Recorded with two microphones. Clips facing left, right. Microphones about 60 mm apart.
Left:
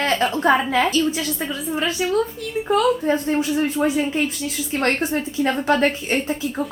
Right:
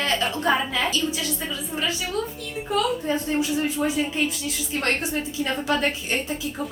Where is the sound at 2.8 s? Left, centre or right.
Left.